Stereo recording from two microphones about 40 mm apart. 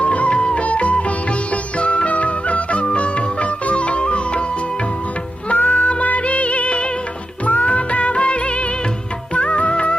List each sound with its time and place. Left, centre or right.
0.0 s music: left
5.5 s music: left
7.4 s music of bollywood: left